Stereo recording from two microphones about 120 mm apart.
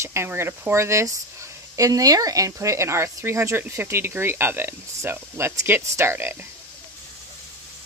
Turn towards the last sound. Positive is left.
turn(degrees=-20)  # may be behind; listen again after turning